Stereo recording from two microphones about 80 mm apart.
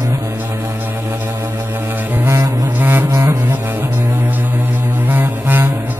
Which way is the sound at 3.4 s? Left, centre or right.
Right.